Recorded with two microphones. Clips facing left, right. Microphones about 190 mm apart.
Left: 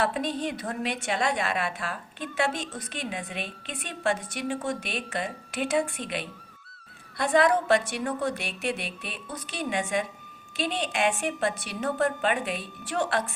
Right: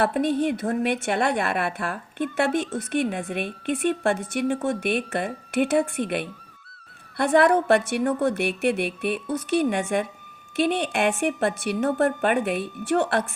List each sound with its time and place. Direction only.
0.0 s a woman's voice: 55° right (ahead or behind)